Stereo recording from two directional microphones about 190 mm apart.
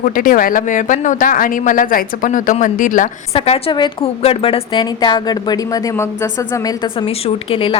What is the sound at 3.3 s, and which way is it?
A woman's voice, 30° left (ahead or behind).